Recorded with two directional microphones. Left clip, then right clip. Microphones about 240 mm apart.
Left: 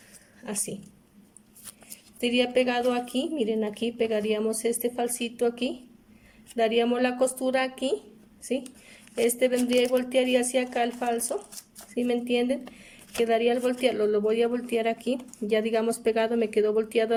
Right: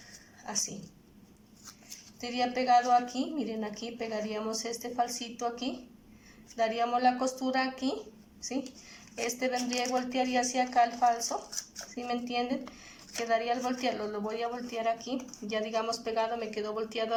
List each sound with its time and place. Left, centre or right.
2.2 s a woman's voice: left
9.1 s a woman's voice: left